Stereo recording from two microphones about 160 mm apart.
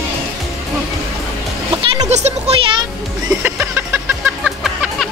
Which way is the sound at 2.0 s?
45° right (ahead or behind).